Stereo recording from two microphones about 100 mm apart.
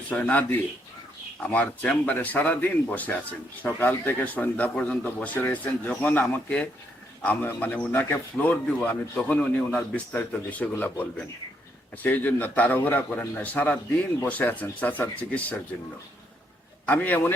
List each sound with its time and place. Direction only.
0.1 s speech: 15° left (ahead or behind)
16.8 s speech: 15° left (ahead or behind)